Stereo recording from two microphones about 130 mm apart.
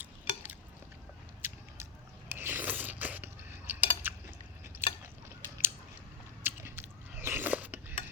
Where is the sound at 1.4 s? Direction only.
20° right (ahead or behind).